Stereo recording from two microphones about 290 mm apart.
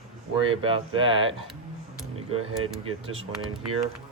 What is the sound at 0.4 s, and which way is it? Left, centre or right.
Speech, centre.